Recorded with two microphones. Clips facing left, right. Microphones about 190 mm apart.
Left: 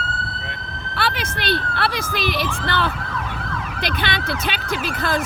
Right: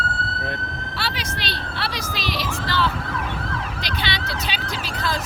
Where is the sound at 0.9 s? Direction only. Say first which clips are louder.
Left 6 dB; 55° left (ahead or behind).